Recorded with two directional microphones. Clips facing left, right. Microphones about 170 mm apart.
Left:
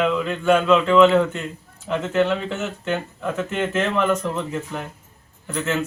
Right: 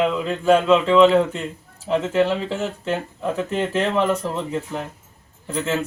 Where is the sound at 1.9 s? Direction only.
30° right (ahead or behind).